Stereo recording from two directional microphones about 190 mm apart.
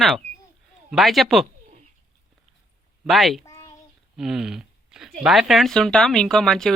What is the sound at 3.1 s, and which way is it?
Speech, centre (ahead or behind).